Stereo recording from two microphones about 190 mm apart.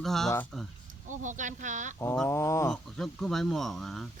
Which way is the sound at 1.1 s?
40° right (ahead or behind).